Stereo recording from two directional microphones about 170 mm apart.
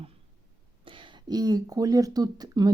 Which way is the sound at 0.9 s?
30° right (ahead or behind).